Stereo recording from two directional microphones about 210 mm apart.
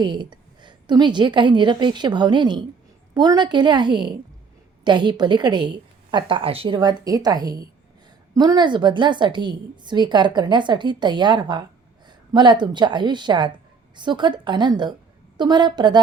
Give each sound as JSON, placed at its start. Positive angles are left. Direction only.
{"t": 0.0, "sound": "a woman's voice", "side_deg": -20}